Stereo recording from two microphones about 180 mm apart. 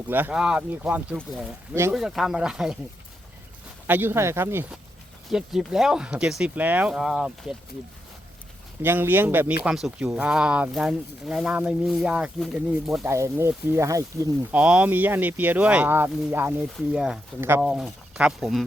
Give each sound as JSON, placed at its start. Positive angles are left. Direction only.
{"t": 0.1, "sound": "speech", "side_deg": -10}
{"t": 3.8, "sound": "speech", "side_deg": -10}
{"t": 8.8, "sound": "speech", "side_deg": -10}
{"t": 13.1, "sound": "speech", "side_deg": -15}
{"t": 14.6, "sound": "speech", "side_deg": -5}